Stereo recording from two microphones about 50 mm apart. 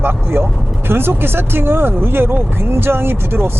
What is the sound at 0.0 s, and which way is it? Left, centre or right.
Speech, right.